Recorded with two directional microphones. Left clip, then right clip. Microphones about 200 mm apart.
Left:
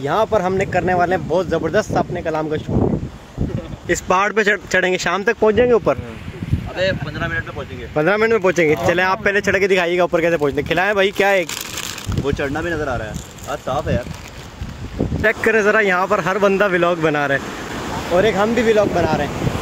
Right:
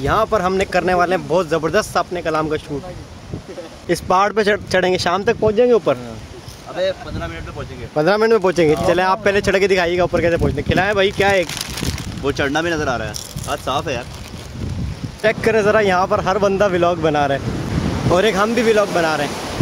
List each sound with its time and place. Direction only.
0.0 s speech: 5° right (ahead or behind)
4.1 s speech: centre (ahead or behind)
5.4 s speech: 25° left (ahead or behind)
6.8 s speech: centre (ahead or behind); by 11.4 s 35° left (ahead or behind)
12.3 s speech: 55° right (ahead or behind)
15.2 s speech: 5° left (ahead or behind)
18.3 s speech: 5° right (ahead or behind)